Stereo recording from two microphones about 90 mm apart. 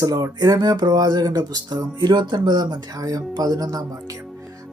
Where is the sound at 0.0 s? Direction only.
40° right (ahead or behind).